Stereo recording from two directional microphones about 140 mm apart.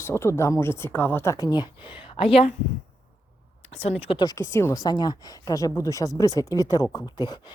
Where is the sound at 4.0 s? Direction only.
40° left (ahead or behind).